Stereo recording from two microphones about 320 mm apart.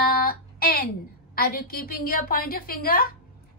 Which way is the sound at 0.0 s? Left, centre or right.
Left.